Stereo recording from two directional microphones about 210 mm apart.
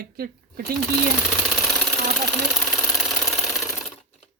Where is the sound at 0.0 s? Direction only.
45° right (ahead or behind).